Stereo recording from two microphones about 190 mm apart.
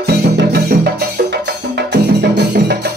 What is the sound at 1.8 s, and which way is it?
Music, 60° right (ahead or behind).